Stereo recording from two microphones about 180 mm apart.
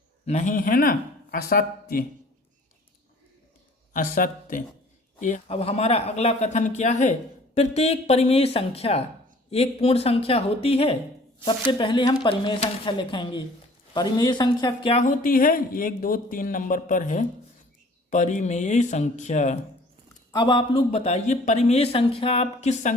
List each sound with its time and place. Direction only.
0.3 s speech: 40° left (ahead or behind)
3.9 s speech: 50° left (ahead or behind)
5.5 s speech: 35° left (ahead or behind)
15.0 s speech: 50° left (ahead or behind)
20.3 s speech: 25° left (ahead or behind)